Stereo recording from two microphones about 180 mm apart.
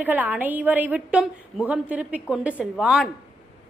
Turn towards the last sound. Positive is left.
turn(degrees=-5)  # may be behind; listen again after turning